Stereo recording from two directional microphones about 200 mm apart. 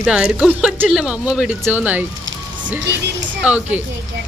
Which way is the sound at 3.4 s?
5° right (ahead or behind).